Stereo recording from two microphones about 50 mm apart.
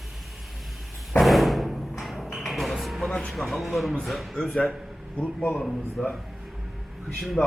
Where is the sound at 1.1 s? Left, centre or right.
Centre.